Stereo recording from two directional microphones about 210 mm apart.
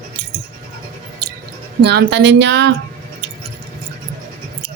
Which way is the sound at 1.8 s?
55° right (ahead or behind).